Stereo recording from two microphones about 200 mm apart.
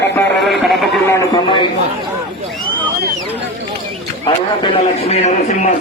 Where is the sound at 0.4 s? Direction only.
Centre (ahead or behind).